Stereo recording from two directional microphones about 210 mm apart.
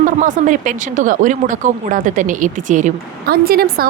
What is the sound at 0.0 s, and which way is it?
Speech, 40° right (ahead or behind).